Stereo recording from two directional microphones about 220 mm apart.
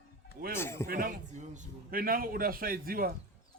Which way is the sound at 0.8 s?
40° right (ahead or behind).